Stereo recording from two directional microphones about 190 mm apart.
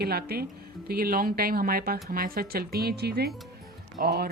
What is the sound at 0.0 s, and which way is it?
A woman's voice, 55° right (ahead or behind).